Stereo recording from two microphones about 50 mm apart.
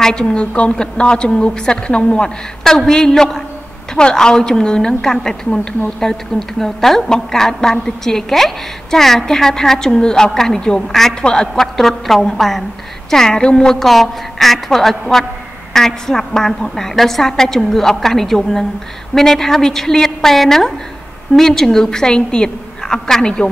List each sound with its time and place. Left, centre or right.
0.0 s a woman's voice: centre
13.7 s a woman's voice: centre